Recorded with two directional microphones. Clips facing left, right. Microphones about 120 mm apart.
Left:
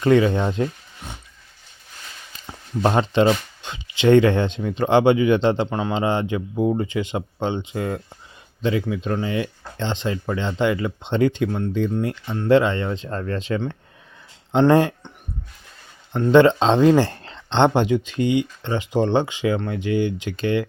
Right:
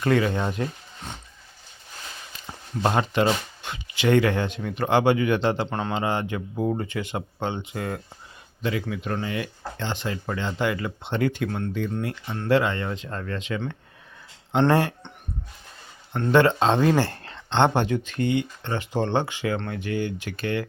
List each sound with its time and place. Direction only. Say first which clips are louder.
0.0 s speech: left 5 dB; 20° left (ahead or behind)
2.8 s speech: left 4 dB; 25° left (ahead or behind)
14.6 s speech: left 5 dB; 20° left (ahead or behind)
16.1 s speech: left 5 dB; 20° left (ahead or behind)